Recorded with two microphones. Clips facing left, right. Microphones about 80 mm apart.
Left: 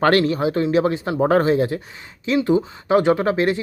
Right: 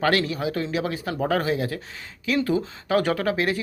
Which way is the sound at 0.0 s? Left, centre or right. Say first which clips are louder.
Left 6 dB; left.